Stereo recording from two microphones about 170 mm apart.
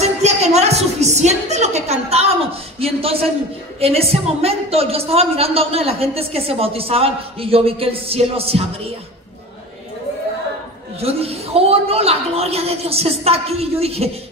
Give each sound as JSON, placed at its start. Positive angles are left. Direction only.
{"t": 0.0, "sound": "a sound", "side_deg": -40}
{"t": 2.8, "sound": "a woman's voice", "side_deg": -35}
{"t": 11.0, "sound": "a woman's voice", "side_deg": -35}